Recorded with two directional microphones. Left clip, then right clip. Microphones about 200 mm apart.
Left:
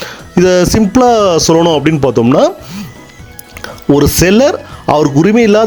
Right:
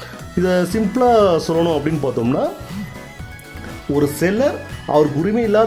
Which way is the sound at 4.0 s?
40° left (ahead or behind).